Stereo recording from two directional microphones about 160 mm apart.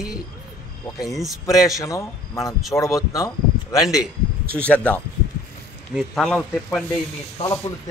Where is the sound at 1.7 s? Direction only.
20° left (ahead or behind).